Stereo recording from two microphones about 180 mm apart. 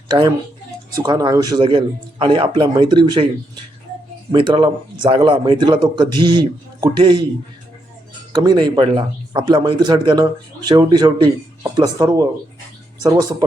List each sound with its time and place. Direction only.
0.1 s a man's voice: 25° right (ahead or behind)
8.3 s a man's voice: 25° right (ahead or behind)